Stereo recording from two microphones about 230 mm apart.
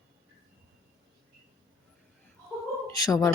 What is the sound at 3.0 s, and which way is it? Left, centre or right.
Speech, centre.